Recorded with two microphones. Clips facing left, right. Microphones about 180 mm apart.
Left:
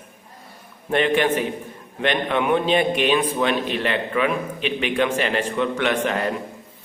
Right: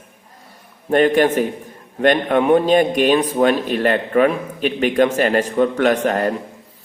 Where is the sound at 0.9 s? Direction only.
40° right (ahead or behind).